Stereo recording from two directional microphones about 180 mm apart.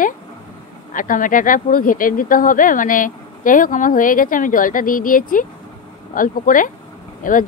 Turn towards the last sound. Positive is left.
turn(degrees=50)  # may be behind; listen again after turning